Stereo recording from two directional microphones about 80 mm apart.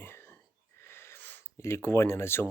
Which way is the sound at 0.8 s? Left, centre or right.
Left.